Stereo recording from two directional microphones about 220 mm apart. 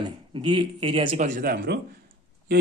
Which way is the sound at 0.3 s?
20° right (ahead or behind).